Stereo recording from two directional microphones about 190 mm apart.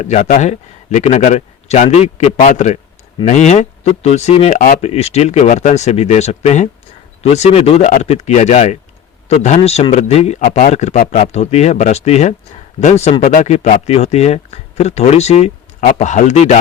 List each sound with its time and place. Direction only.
0.0 s speech: 40° left (ahead or behind)